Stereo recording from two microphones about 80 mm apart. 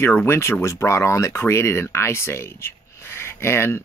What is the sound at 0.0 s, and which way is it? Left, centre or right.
Speech, left.